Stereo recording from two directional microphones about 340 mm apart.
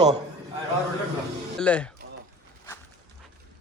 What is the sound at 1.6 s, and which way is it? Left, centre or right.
Speech, centre.